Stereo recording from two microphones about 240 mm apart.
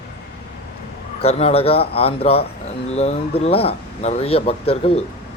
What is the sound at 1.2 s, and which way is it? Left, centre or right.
Speech, left.